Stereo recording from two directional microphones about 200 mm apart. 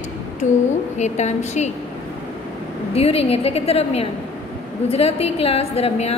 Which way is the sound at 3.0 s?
30° left (ahead or behind).